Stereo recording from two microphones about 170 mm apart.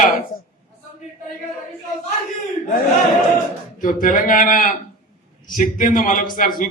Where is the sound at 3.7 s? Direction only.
50° left (ahead or behind).